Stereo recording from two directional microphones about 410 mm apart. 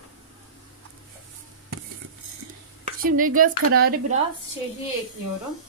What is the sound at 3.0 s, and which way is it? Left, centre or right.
Speech, centre.